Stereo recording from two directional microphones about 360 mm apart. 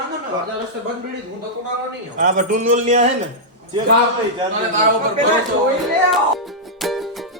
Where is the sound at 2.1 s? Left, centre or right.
Right.